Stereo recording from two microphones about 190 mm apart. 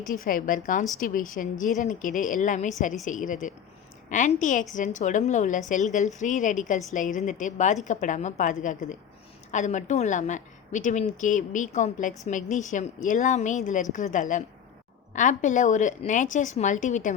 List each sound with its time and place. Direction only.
0.0 s a woman's voice: 45° left (ahead or behind)